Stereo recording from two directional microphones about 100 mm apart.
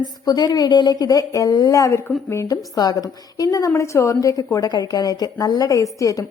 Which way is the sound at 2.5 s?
40° left (ahead or behind).